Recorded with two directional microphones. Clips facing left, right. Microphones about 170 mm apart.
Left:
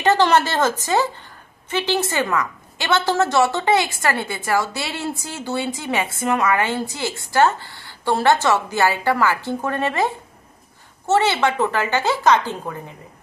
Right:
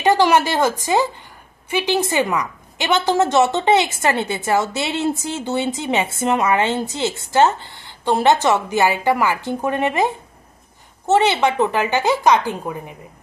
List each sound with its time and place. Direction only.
0.0 s a woman's voice: 10° right (ahead or behind)